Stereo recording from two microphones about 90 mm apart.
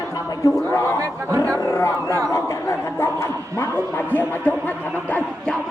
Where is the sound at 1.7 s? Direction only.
35° left (ahead or behind).